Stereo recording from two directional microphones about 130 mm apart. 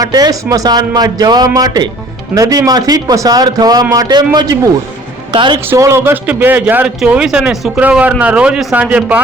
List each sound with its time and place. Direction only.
0.0 s a man's voice: 30° right (ahead or behind)
5.3 s speech: 40° right (ahead or behind)
5.6 s speech: 20° right (ahead or behind)